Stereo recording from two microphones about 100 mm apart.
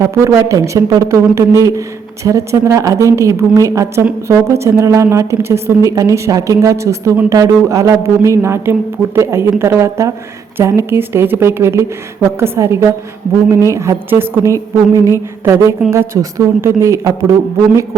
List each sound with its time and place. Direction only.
0.0 s a woman's voice: 30° right (ahead or behind)